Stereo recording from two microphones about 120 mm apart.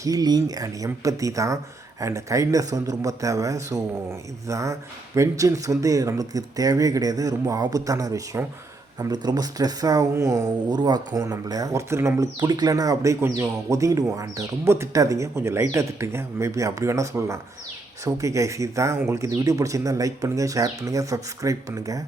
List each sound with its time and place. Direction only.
0.0 s speech: 30° right (ahead or behind)
12.4 s speech: 35° right (ahead or behind)